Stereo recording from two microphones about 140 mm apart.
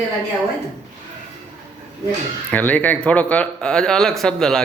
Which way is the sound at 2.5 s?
10° left (ahead or behind).